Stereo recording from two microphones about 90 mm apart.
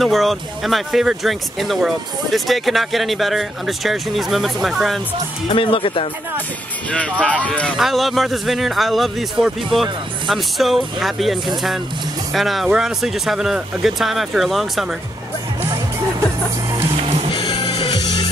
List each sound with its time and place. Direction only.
0.0 s speech: centre (ahead or behind)
5.5 s speech: 75° left (ahead or behind)
6.9 s speech: 15° left (ahead or behind)
7.7 s speech: centre (ahead or behind)
17.3 s music: 55° left (ahead or behind)